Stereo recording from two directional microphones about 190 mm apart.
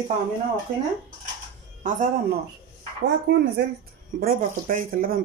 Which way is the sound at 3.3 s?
65° right (ahead or behind).